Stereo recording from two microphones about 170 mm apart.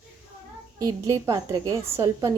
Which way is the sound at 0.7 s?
20° right (ahead or behind).